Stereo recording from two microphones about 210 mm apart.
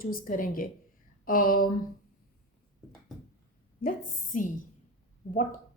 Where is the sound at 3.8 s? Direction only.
40° left (ahead or behind).